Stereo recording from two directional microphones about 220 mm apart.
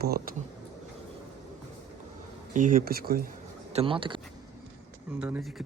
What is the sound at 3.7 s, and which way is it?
Speech, 25° right (ahead or behind).